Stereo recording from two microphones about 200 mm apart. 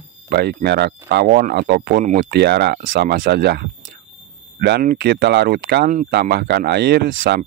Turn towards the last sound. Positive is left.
turn(degrees=-55)  # may be behind; listen again after turning